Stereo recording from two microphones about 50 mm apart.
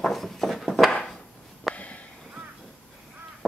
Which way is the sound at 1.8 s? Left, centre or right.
Left.